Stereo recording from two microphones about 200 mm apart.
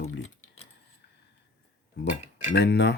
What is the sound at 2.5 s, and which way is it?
Speech, 60° left (ahead or behind).